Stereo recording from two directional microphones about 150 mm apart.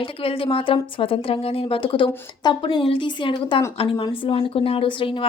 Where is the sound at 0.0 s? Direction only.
40° left (ahead or behind).